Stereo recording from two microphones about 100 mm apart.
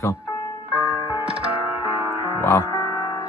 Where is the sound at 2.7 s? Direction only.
45° left (ahead or behind).